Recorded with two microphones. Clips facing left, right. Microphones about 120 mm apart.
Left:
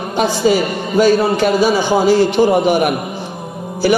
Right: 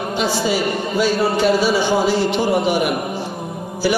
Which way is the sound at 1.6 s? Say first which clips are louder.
Left 4 dB; 50° left (ahead or behind).